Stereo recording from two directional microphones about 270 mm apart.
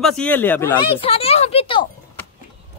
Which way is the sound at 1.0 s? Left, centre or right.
Left.